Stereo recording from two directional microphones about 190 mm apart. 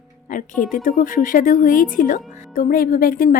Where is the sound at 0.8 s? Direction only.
45° left (ahead or behind).